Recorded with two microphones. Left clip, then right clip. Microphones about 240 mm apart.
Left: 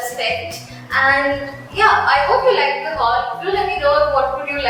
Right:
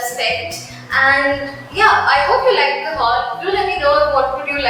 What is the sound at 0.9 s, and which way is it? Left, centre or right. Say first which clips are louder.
A woman's voice: right 2 dB; centre.